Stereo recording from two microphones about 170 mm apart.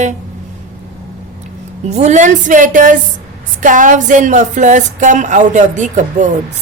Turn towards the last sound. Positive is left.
turn(degrees=-45)  # may be behind; listen again after turning